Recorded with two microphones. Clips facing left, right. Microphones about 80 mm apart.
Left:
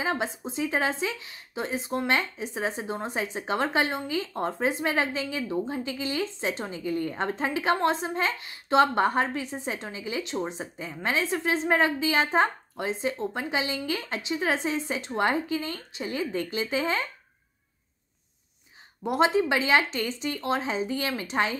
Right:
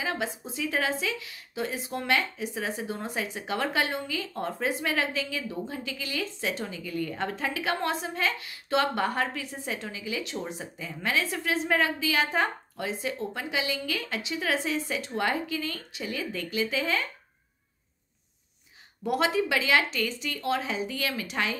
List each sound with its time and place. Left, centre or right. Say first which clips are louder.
0.0 s speech: left 3 dB; left
19.0 s speech: left 3 dB; left